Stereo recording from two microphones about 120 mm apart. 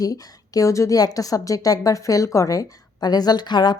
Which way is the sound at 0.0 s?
30° left (ahead or behind).